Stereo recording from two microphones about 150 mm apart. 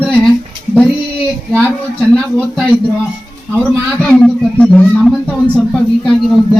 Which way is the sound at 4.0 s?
5° left (ahead or behind).